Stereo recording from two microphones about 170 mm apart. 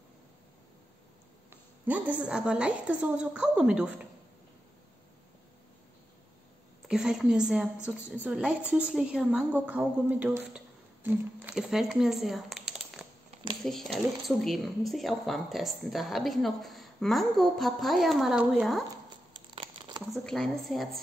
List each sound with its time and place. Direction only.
1.9 s speech: 10° right (ahead or behind)
6.9 s a woman's voice: 5° right (ahead or behind)
19.3 s crumpling: 30° right (ahead or behind)
20.1 s speech: centre (ahead or behind)